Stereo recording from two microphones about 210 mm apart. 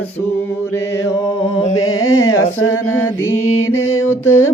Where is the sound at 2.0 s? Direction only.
75° left (ahead or behind).